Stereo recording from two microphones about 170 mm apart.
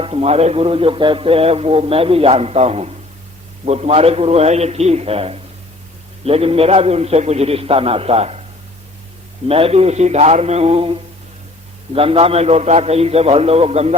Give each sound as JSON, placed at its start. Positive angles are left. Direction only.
{"t": 0.0, "sound": "a man's voice", "side_deg": -35}
{"t": 9.5, "sound": "a man's voice", "side_deg": -35}
{"t": 11.9, "sound": "a man's voice", "side_deg": -35}